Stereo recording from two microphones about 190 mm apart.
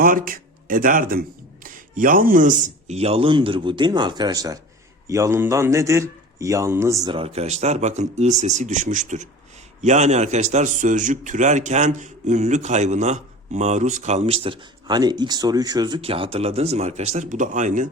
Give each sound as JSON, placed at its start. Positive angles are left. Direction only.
{"t": 0.0, "sound": "a man's voice", "side_deg": -50}
{"t": 7.1, "sound": "a man's voice", "side_deg": -30}